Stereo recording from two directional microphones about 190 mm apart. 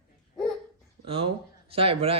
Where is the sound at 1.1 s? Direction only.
30° right (ahead or behind).